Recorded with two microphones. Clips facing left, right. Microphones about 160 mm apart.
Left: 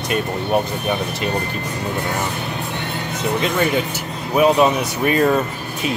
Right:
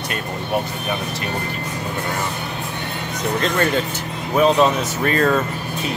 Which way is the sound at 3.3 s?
10° left (ahead or behind).